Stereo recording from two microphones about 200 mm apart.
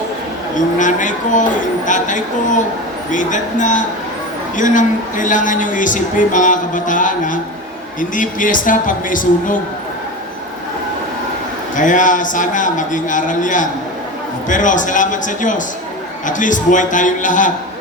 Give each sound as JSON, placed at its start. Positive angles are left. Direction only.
{"t": 0.8, "sound": "a man's voice", "side_deg": 40}
{"t": 11.8, "sound": "a man's voice", "side_deg": 40}